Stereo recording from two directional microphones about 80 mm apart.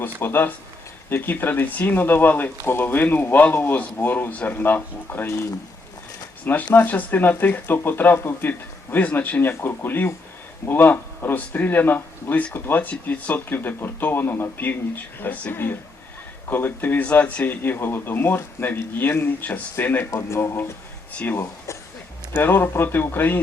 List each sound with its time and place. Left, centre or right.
0.0 s a man's voice: left
6.4 s a man's voice: left
20.1 s speech: left
22.3 s a man's voice: left